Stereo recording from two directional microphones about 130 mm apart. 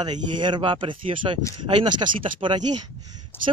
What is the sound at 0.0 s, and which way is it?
Speech, 35° right (ahead or behind).